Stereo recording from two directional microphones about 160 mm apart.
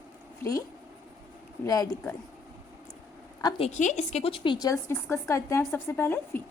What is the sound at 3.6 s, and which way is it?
A woman's voice, 45° left (ahead or behind).